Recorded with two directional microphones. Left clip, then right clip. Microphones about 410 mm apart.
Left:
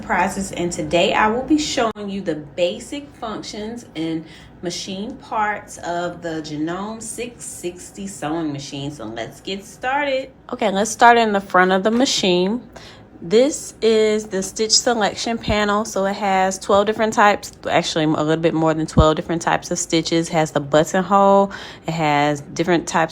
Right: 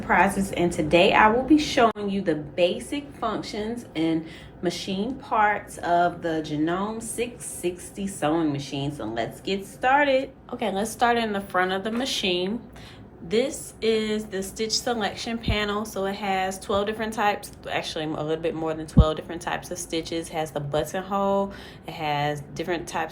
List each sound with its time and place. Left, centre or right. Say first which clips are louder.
0.1 s speech: left 1 dB; centre
10.5 s a woman's voice: left 8 dB; centre